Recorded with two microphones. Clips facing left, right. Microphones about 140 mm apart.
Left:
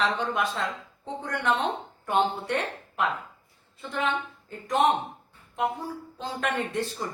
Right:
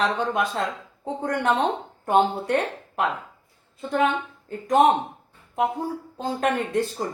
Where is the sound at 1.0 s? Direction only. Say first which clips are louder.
Right 5 dB; 45° right (ahead or behind).